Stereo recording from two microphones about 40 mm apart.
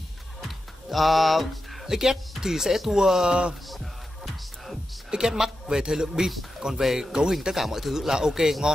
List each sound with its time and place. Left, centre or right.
0.4 s music: centre
1.9 s speech: centre
3.6 s music: centre
5.1 s speech: centre